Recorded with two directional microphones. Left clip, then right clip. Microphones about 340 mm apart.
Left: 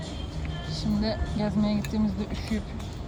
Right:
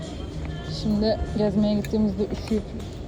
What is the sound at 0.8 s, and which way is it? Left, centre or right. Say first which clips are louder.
Speech: right 7 dB; centre.